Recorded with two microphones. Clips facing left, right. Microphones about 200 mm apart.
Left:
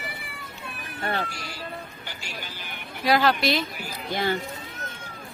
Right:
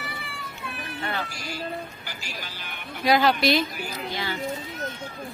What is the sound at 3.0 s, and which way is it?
Speech, centre (ahead or behind).